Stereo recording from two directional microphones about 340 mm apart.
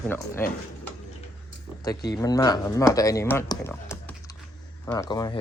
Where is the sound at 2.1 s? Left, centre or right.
Centre.